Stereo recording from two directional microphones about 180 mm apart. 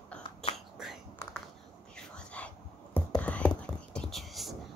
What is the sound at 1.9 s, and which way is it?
Whispering, 5° left (ahead or behind).